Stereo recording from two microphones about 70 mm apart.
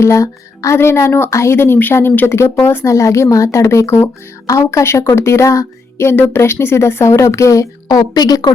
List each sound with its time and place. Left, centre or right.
0.0 s a woman's voice: left
2.9 s speech: left